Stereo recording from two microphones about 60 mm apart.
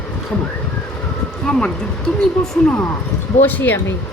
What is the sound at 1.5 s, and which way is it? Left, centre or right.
Speech, centre.